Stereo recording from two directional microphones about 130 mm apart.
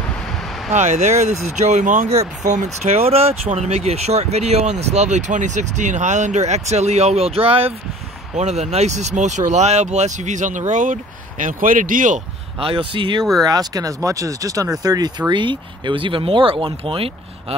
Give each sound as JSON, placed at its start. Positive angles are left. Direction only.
{"t": 0.7, "sound": "speech", "side_deg": -65}
{"t": 8.4, "sound": "speech", "side_deg": -60}
{"t": 12.5, "sound": "speech", "side_deg": -40}